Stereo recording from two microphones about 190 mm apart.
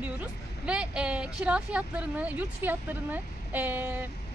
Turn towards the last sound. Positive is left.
turn(degrees=-10)  # may be behind; listen again after turning